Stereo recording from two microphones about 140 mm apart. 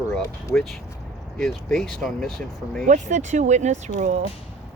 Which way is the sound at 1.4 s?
Centre (ahead or behind).